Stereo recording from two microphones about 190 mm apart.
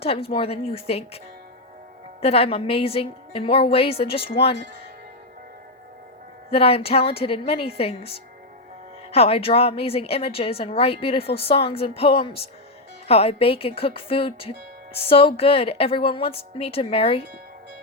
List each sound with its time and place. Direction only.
0.0 s a woman's voice: 30° left (ahead or behind)
2.2 s a woman's voice: 30° left (ahead or behind)
6.5 s a woman's voice: 30° left (ahead or behind)